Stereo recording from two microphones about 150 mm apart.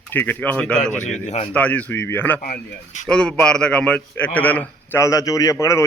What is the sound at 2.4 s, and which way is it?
Speech, 60° left (ahead or behind).